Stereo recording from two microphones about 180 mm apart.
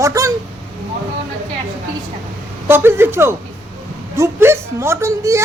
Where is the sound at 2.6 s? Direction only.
15° right (ahead or behind).